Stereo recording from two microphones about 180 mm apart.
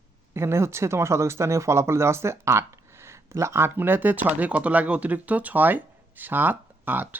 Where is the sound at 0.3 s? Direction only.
15° right (ahead or behind).